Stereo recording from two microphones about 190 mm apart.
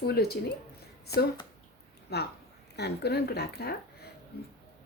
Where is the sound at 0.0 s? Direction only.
55° left (ahead or behind).